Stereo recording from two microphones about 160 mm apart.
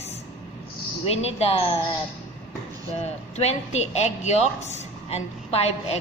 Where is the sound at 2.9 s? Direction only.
40° left (ahead or behind).